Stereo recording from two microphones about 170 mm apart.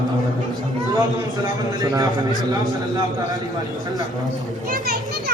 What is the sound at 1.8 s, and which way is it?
Speech, 20° right (ahead or behind).